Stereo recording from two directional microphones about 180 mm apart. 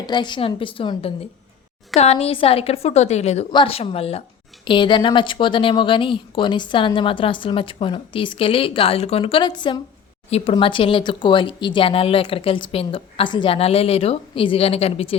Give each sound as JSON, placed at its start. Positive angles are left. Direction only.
{"t": 0.0, "sound": "a woman's voice", "side_deg": 25}
{"t": 10.2, "sound": "speech", "side_deg": 35}